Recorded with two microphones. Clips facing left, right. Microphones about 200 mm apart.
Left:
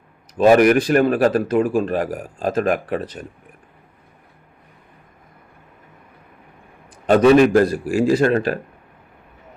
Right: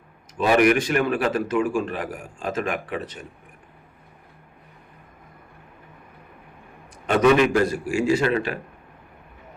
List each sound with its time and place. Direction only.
0.3 s speech: 40° left (ahead or behind)
7.1 s speech: 40° left (ahead or behind)